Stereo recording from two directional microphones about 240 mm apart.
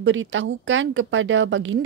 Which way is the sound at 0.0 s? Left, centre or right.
Right.